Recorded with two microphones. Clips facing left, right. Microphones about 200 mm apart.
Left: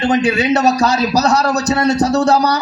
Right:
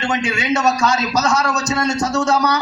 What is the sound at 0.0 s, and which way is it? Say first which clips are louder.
A man's voice: left 7 dB; 35° left (ahead or behind).